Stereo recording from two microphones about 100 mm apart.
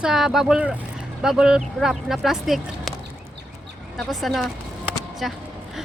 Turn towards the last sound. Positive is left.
turn(degrees=0)  # may be behind; listen again after turning